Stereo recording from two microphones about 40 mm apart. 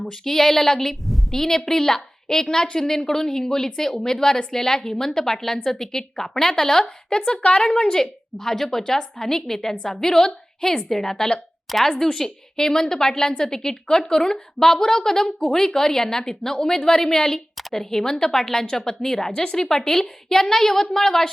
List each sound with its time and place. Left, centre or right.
0.0 s a woman's voice: centre
8.4 s a woman's voice: centre
17.6 s a sound: centre
17.9 s a woman's voice: centre